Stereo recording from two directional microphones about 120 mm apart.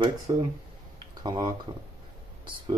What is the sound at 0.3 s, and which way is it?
Speech, 35° right (ahead or behind).